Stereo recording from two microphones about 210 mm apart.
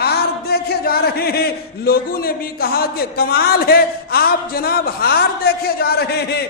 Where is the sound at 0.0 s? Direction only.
50° left (ahead or behind).